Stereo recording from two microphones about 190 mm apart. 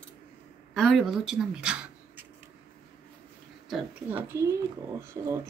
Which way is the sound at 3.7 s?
10° right (ahead or behind).